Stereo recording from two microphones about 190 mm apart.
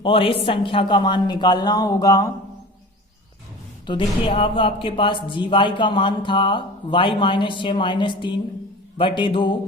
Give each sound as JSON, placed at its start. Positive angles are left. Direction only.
{"t": 0.0, "sound": "speech", "side_deg": 30}
{"t": 3.8, "sound": "speech", "side_deg": 30}